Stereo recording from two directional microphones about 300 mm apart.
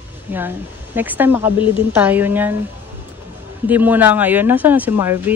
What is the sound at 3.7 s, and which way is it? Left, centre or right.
Speech, centre.